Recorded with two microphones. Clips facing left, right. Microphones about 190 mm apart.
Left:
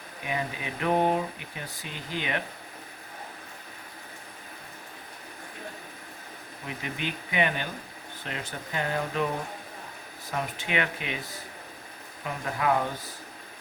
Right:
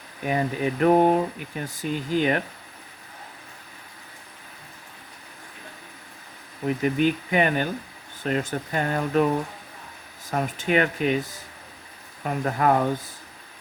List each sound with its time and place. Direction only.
0.3 s speech: 45° right (ahead or behind)
6.7 s speech: 45° right (ahead or behind)
10.3 s speech: 45° right (ahead or behind)
12.2 s speech: 45° right (ahead or behind)